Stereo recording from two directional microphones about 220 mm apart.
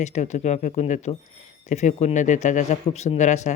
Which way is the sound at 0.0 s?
30° left (ahead or behind).